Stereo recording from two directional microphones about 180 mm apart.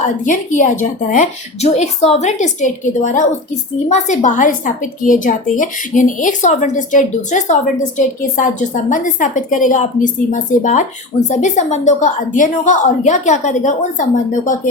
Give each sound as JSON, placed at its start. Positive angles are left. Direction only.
{"t": 0.0, "sound": "a woman's voice", "side_deg": 45}